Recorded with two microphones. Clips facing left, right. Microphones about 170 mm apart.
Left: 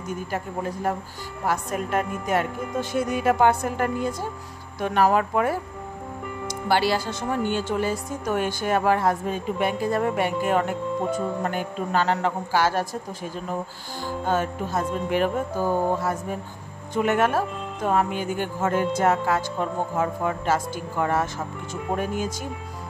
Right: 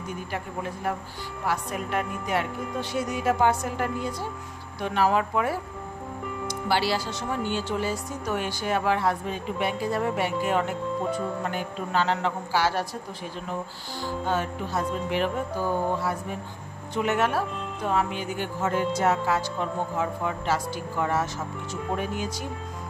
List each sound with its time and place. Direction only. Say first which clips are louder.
0.3 s a man's voice: left 4 dB; 40° left (ahead or behind)
14.0 s speech: left 3 dB; 50° left (ahead or behind)